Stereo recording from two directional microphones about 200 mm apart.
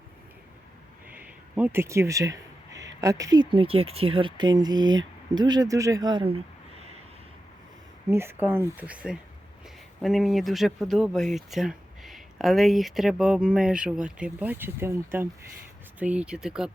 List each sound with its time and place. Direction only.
1.5 s speech: 10° right (ahead or behind); by 6.8 s 30° right (ahead or behind)
8.1 s speech: 10° right (ahead or behind)